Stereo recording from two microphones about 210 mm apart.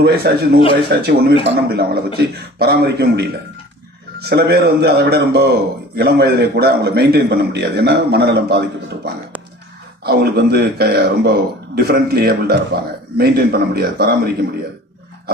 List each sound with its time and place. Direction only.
0.0 s speech: 50° right (ahead or behind)
10.0 s speech: 50° right (ahead or behind)